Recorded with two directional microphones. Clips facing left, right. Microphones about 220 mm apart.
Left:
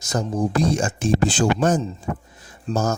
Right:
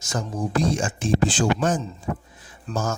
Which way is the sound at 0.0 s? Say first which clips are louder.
Left 5 dB; 35° left (ahead or behind).